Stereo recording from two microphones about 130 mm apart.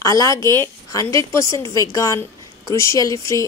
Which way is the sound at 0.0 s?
25° left (ahead or behind).